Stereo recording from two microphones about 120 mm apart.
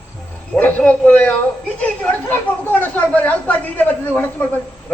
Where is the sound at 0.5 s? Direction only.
10° left (ahead or behind).